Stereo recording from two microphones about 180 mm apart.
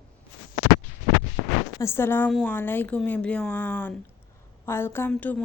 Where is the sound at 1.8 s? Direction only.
15° left (ahead or behind).